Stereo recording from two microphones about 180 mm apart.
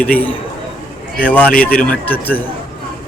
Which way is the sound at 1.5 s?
50° left (ahead or behind).